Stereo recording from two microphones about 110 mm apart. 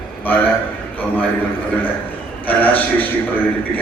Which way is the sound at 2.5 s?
15° left (ahead or behind).